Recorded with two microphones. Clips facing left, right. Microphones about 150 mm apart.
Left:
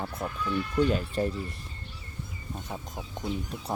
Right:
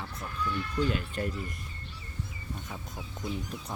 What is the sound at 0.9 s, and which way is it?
Speech, 35° left (ahead or behind).